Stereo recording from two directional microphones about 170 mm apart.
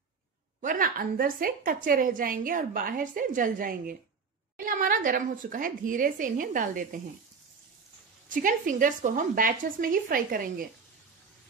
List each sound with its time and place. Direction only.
0.6 s a woman's voice: 55° right (ahead or behind)
8.3 s a woman's voice: 50° right (ahead or behind)